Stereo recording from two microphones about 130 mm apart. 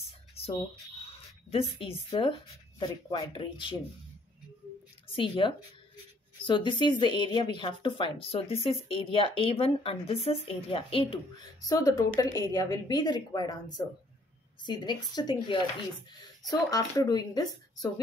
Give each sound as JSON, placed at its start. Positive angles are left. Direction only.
{"t": 1.5, "sound": "speech", "side_deg": 45}
{"t": 5.0, "sound": "speech", "side_deg": 45}
{"t": 11.6, "sound": "a woman's voice", "side_deg": 25}
{"t": 14.6, "sound": "a woman's voice", "side_deg": 35}